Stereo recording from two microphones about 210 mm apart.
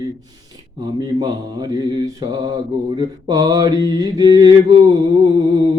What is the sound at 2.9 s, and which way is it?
Mantra, 20° right (ahead or behind).